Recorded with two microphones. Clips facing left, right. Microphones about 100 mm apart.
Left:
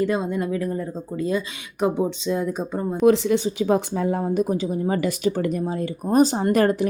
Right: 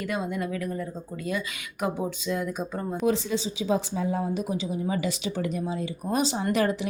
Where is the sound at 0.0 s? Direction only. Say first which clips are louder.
Left 7 dB; 30° left (ahead or behind).